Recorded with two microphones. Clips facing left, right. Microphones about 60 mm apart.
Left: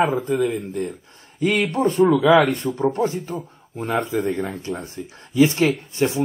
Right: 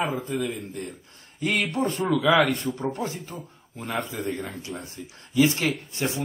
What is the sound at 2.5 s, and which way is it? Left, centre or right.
A man's voice, left.